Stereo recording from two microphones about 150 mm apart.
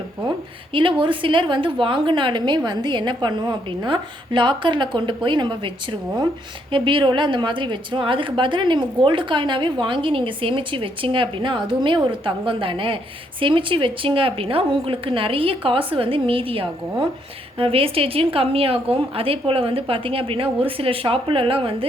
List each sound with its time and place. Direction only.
0.7 s a woman's voice: 35° right (ahead or behind)